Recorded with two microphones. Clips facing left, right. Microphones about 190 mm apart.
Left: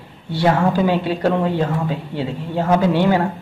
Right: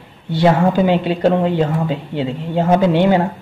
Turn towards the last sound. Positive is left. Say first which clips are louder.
# right 3 dB
turn(degrees=-20)  # may be behind; listen again after turning